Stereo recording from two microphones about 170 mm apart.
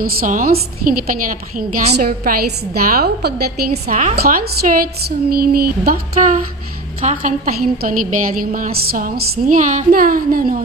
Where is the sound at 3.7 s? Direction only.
45° right (ahead or behind); by 5.9 s 60° right (ahead or behind).